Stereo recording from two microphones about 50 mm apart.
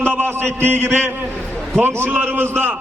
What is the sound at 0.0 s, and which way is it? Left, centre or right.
Speech, right.